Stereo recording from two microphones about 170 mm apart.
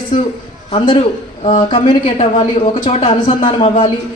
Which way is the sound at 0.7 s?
30° left (ahead or behind).